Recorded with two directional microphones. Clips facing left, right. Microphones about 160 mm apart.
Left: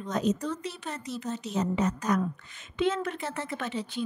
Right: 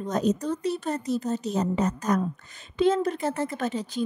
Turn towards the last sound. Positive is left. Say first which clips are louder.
# right 4 dB
turn(degrees=-40)  # may be behind; listen again after turning